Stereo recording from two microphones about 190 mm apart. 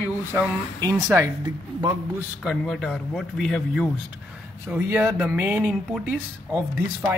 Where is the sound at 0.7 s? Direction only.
15° right (ahead or behind).